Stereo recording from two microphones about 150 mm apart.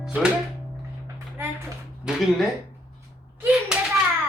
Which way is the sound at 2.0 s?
Centre (ahead or behind).